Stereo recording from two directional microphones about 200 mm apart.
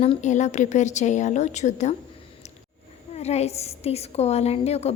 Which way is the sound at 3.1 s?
30° left (ahead or behind).